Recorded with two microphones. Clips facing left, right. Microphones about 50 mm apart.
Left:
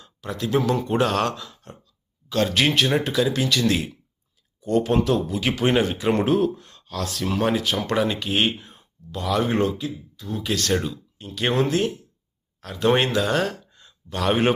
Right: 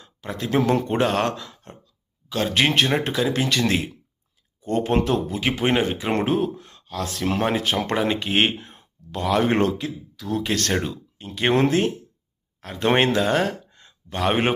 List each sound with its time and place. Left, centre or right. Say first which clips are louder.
0.0 s a sound: left 1 dB; right
0.5 s speech: right 2 dB; right
0.9 s speech: even; right
3.3 s speech: even; right; by 7.0 s centre
7.0 s speech: even; right
7.9 s speech: right 1 dB; right
10.2 s speech: right 7 dB; right
10.4 s speech: left 2 dB; right
10.8 s speech: right 1 dB; right